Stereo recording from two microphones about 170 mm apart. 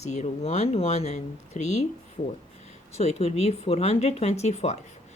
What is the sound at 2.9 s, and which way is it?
Speech, 40° left (ahead or behind).